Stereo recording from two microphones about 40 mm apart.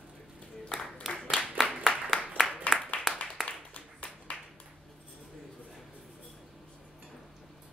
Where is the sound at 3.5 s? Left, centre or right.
Left.